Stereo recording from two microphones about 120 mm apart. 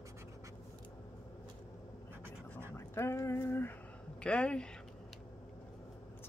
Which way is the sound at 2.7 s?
20° left (ahead or behind).